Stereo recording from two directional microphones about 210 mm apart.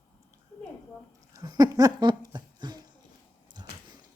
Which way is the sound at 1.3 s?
20° right (ahead or behind).